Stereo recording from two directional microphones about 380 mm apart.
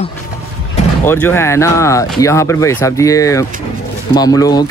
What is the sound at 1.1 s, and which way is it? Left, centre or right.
Speech, centre.